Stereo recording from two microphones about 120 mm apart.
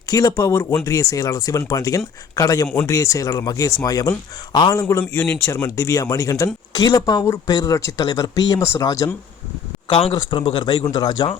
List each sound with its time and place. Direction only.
0.1 s speech: 30° left (ahead or behind)
4.8 s speech: 20° left (ahead or behind)
9.9 s speech: 50° left (ahead or behind)